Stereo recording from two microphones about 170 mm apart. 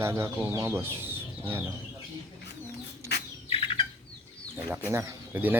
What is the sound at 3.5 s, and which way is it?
Chicken, 30° left (ahead or behind).